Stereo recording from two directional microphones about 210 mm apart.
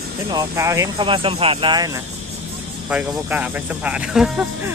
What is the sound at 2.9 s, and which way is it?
Speech, 5° right (ahead or behind).